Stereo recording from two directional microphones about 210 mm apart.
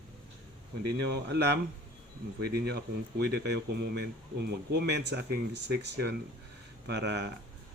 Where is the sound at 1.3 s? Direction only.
55° right (ahead or behind).